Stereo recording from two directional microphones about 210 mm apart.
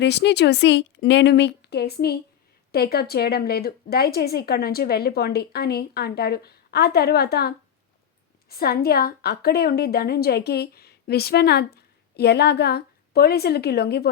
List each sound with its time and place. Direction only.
0.0 s a woman's voice: 55° left (ahead or behind)